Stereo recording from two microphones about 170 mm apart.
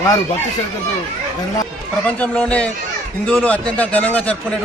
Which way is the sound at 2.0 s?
10° left (ahead or behind).